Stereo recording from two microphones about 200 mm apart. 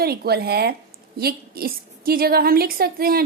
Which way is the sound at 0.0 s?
50° right (ahead or behind).